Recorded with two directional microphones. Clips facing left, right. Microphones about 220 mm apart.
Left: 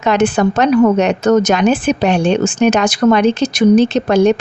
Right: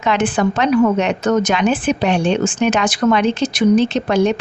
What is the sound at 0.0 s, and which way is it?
Speech, 40° left (ahead or behind).